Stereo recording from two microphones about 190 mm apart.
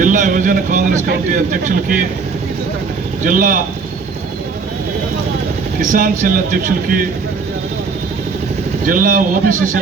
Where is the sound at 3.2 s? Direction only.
45° right (ahead or behind).